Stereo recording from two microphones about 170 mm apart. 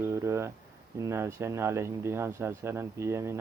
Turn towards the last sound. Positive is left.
turn(degrees=-15)  # may be behind; listen again after turning